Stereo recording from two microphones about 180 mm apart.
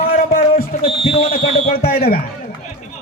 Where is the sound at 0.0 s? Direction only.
55° left (ahead or behind).